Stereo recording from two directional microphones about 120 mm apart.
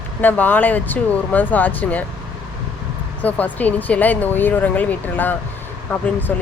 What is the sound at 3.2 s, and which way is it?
Speech, 15° left (ahead or behind).